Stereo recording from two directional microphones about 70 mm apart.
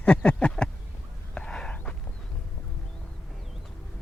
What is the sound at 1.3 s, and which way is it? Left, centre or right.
Whispering, centre.